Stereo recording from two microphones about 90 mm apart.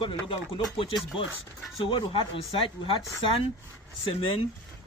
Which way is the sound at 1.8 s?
70° left (ahead or behind).